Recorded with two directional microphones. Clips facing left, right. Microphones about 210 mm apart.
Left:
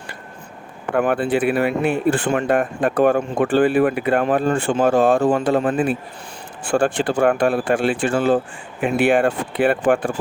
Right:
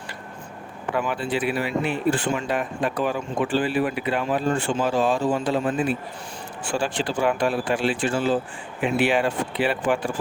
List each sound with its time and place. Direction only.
0.9 s speech: 55° left (ahead or behind)